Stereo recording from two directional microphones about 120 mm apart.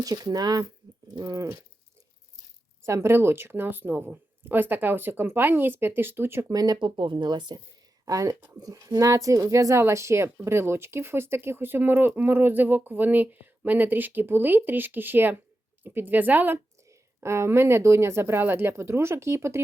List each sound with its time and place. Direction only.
0.0 s speech: 30° right (ahead or behind)
2.8 s speech: 20° right (ahead or behind)
6.5 s a woman's voice: 30° right (ahead or behind)